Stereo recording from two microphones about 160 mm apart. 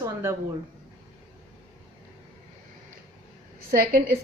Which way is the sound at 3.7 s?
60° right (ahead or behind).